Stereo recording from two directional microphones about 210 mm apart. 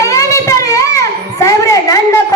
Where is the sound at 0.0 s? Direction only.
15° left (ahead or behind).